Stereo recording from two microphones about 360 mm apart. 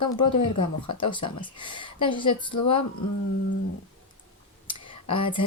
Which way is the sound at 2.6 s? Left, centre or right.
Left.